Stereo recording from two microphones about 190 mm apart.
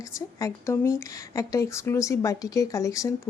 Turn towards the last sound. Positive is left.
turn(degrees=15)  # may be behind; listen again after turning